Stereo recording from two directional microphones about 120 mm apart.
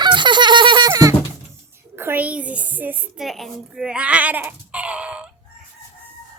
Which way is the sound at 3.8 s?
10° right (ahead or behind).